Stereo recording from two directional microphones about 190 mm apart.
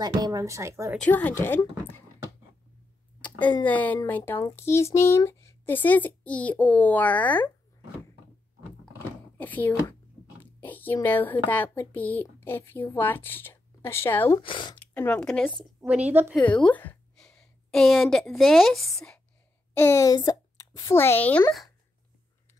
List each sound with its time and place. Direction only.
0.0 s speech: 20° right (ahead or behind)
1.0 s speech: 10° left (ahead or behind)
3.2 s a sound: 10° left (ahead or behind)
3.6 s speech: 10° left (ahead or behind)
9.4 s speech: 10° left (ahead or behind)
14.4 s speech: 25° left (ahead or behind)
15.0 s speech: 10° left (ahead or behind)
15.8 s speech: 5° right (ahead or behind)
16.3 s a sound: 5° left (ahead or behind)
18.3 s speech: centre (ahead or behind)
19.8 s speech: 15° left (ahead or behind)